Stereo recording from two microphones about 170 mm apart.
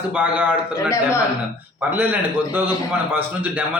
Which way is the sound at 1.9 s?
10° right (ahead or behind).